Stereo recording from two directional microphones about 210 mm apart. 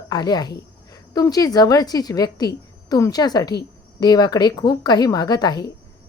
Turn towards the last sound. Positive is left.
turn(degrees=20)  # may be behind; listen again after turning